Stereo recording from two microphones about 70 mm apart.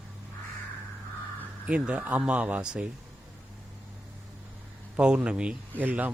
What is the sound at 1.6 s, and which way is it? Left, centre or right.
Speech, centre.